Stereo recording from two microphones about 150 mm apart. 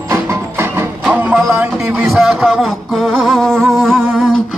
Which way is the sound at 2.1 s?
5° right (ahead or behind).